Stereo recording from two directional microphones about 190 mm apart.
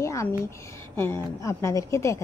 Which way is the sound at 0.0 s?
15° left (ahead or behind).